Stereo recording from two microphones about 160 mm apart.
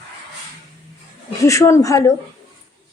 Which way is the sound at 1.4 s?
20° left (ahead or behind).